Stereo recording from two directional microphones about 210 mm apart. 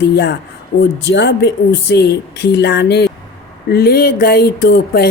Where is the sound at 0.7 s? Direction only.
40° left (ahead or behind).